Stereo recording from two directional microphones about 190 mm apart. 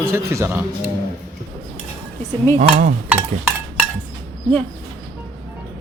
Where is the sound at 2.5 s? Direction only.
40° right (ahead or behind).